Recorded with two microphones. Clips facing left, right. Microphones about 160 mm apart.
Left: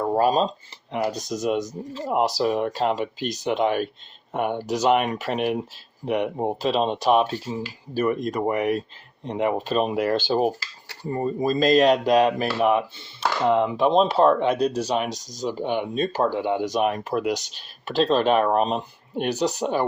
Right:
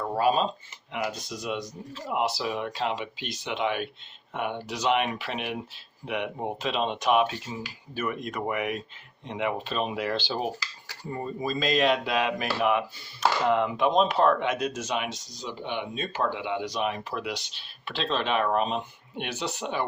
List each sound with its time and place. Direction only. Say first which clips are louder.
0.1 s speech: left 3 dB; 40° left (ahead or behind)